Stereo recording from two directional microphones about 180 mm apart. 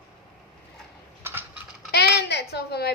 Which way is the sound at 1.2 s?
10° right (ahead or behind).